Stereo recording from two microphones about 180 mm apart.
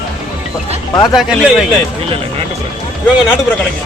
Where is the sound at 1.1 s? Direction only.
Centre (ahead or behind).